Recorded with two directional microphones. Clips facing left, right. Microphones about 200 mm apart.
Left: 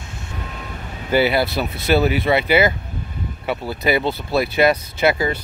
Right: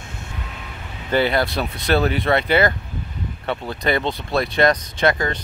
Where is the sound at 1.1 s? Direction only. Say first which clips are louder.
Left 2 dB; 5° left (ahead or behind).